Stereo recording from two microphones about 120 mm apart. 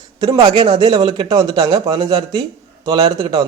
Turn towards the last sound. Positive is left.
turn(degrees=-35)  # may be behind; listen again after turning